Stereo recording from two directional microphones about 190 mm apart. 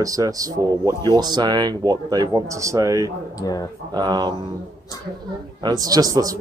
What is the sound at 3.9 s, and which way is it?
Speech, 20° right (ahead or behind).